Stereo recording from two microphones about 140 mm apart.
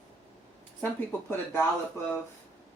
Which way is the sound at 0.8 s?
15° left (ahead or behind).